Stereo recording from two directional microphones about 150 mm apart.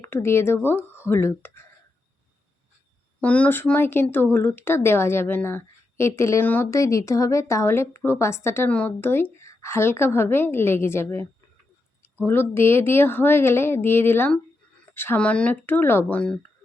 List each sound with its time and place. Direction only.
0.0 s speech: 15° left (ahead or behind)
3.2 s speech: 10° left (ahead or behind)